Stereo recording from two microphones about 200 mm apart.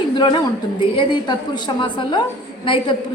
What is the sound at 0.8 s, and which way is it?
A woman's voice, 20° left (ahead or behind).